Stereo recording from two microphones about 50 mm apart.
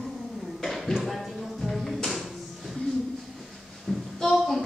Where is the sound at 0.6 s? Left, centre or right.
Centre.